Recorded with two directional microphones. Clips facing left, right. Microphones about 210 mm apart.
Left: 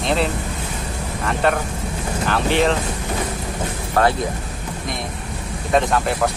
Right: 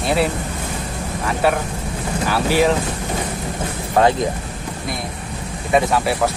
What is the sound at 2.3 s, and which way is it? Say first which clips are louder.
Speech: right 2 dB; 5° right (ahead or behind).